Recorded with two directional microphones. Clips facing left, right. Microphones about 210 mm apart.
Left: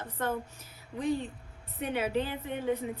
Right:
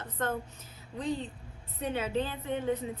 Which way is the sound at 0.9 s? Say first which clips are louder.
Left 3 dB; 10° left (ahead or behind).